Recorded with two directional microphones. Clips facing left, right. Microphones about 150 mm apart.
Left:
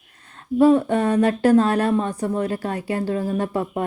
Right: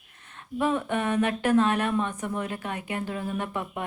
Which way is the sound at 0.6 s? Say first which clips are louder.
Left 10 dB; 35° left (ahead or behind).